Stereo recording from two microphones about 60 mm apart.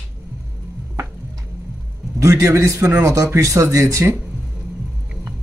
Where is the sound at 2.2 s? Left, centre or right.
Right.